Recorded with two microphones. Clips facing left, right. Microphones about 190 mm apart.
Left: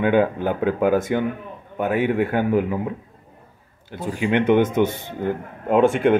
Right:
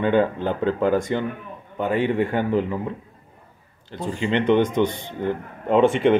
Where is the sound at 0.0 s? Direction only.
10° left (ahead or behind).